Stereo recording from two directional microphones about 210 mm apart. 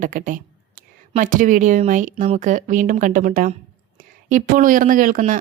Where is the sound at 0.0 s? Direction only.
40° right (ahead or behind).